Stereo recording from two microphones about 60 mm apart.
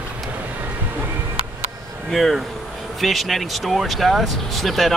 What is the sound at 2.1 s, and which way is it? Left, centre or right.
Speech, centre.